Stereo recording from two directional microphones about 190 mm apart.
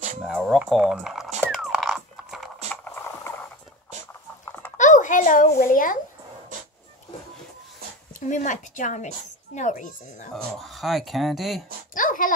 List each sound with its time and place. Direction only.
0.2 s speech: centre (ahead or behind)
1.6 s biting: centre (ahead or behind)
2.7 s rowboat: 10° left (ahead or behind)
4.7 s a child's voice: 40° left (ahead or behind)
8.1 s speech: 40° left (ahead or behind)
10.3 s speech: centre (ahead or behind)
11.9 s speech: 45° left (ahead or behind)